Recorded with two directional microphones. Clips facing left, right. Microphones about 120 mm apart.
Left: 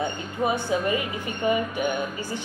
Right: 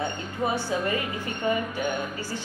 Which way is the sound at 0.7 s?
15° left (ahead or behind).